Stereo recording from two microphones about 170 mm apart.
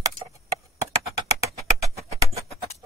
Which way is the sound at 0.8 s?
20° right (ahead or behind).